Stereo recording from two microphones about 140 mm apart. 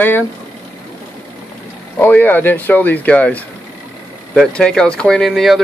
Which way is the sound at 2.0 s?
15° left (ahead or behind).